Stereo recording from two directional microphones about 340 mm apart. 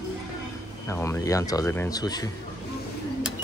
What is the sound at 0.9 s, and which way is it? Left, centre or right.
Speech, centre.